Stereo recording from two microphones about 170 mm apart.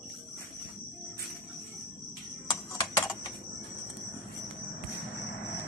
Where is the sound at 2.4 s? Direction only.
20° left (ahead or behind).